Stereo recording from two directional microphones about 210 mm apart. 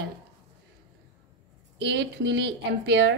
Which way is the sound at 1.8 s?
60° right (ahead or behind).